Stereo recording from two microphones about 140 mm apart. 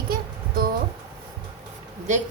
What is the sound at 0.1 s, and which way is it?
Music, 90° right.